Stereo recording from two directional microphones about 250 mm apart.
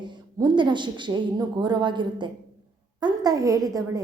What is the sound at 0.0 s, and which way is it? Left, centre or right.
A woman's voice, centre.